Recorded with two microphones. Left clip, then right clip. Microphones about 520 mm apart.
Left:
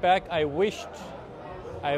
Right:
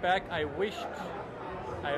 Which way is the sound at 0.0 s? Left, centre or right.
Left.